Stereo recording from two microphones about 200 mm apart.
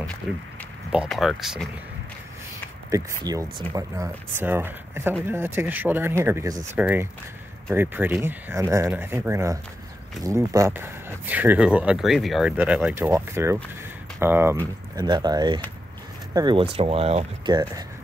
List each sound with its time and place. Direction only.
0.0 s a sound: 5° left (ahead or behind)
0.9 s speech: centre (ahead or behind)
2.9 s speech: 15° right (ahead or behind)